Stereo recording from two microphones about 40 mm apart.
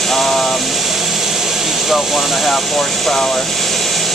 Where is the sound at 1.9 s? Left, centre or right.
Centre.